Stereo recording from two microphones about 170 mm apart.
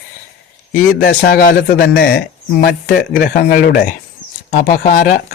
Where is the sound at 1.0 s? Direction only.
65° left (ahead or behind).